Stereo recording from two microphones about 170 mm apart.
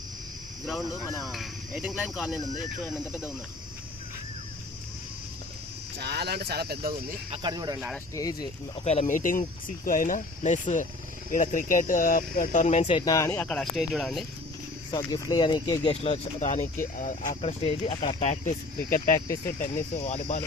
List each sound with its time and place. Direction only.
0.6 s speech: centre (ahead or behind)
2.4 s speech: 20° left (ahead or behind)
6.0 s speech: 75° right (ahead or behind)
7.4 s speech: 25° right (ahead or behind)
8.1 s speech: 20° left (ahead or behind)
8.8 s speech: 40° left (ahead or behind)
13.1 s speech: 15° left (ahead or behind); by 14.3 s centre (ahead or behind)
14.8 s speech: 25° left (ahead or behind); by 18.5 s 40° left (ahead or behind)
18.8 s speech: 55° left (ahead or behind)